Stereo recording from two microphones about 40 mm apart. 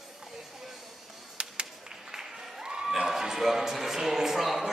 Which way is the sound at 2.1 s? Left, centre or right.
Centre.